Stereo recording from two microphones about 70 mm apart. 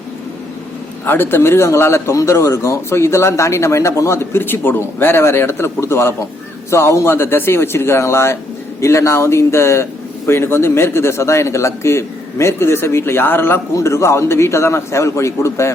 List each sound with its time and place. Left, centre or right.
1.0 s speech: left
13.7 s speech: left